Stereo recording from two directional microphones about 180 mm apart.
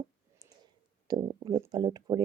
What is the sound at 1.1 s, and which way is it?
Speech, 25° right (ahead or behind).